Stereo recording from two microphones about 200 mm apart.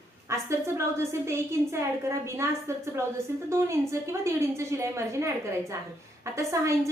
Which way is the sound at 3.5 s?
15° right (ahead or behind).